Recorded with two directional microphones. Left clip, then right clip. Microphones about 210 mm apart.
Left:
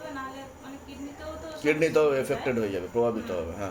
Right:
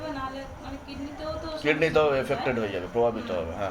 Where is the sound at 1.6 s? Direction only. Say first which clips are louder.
Even; 30° left (ahead or behind).